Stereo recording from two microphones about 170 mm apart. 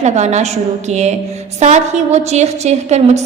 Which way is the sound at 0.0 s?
40° right (ahead or behind).